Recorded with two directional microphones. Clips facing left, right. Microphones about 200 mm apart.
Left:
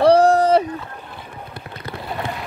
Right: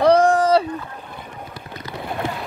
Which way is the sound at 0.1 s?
35° left (ahead or behind).